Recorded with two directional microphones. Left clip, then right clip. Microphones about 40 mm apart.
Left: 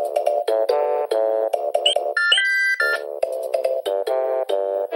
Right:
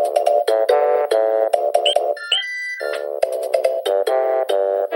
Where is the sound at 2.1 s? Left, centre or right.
Left.